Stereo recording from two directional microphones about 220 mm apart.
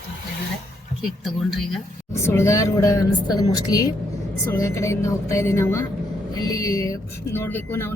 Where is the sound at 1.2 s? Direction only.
Centre (ahead or behind).